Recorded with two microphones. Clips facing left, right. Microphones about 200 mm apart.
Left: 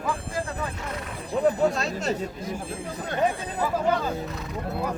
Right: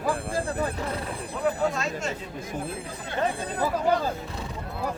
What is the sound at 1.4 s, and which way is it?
Speech, 35° left (ahead or behind).